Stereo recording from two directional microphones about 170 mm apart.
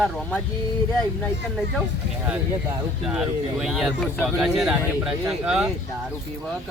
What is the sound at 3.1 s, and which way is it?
Speech, 5° right (ahead or behind).